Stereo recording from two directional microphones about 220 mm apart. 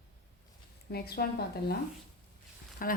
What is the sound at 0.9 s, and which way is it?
Speech, 45° left (ahead or behind).